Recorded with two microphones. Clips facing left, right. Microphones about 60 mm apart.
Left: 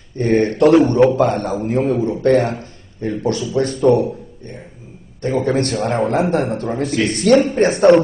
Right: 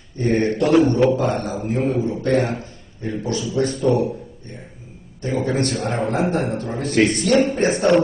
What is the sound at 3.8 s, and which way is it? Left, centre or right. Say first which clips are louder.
Speech: left 6 dB; left.